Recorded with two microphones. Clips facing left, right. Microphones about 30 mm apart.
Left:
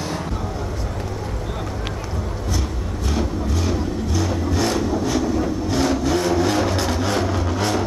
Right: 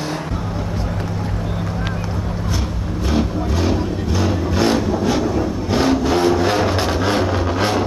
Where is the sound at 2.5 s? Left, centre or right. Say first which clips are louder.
Right 2 dB; right.